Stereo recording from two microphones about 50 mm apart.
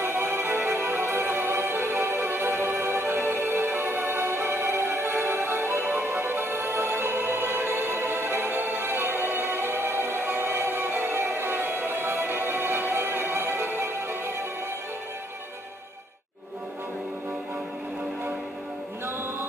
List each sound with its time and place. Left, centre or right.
0.0 s music: right